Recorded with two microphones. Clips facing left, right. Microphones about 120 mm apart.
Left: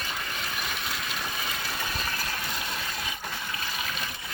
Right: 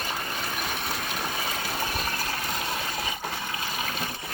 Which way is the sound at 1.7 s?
35° right (ahead or behind).